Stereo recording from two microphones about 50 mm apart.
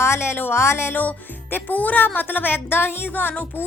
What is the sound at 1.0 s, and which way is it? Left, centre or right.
Music, left.